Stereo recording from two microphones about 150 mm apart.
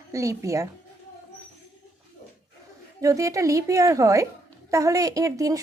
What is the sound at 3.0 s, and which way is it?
Speech, 20° right (ahead or behind).